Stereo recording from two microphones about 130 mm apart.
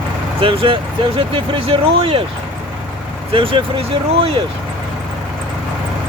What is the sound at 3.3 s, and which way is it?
Speech, 45° right (ahead or behind).